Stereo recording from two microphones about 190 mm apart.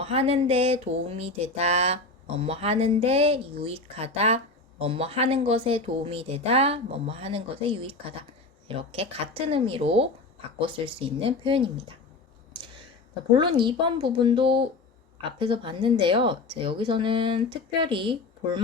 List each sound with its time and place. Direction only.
0.0 s a sound: 30° right (ahead or behind)
10.6 s speech: 30° right (ahead or behind)
13.3 s speech: 25° right (ahead or behind)